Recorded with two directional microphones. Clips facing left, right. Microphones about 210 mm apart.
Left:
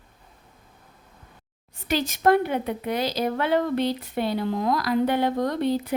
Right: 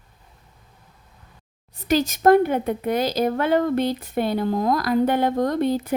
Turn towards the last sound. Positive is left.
turn(degrees=-50)  # may be behind; listen again after turning